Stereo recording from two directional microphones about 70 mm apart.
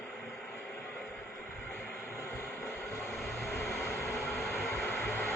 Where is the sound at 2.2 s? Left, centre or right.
Left.